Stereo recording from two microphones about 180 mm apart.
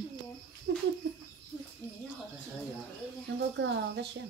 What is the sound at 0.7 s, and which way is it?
Speech, 70° right (ahead or behind).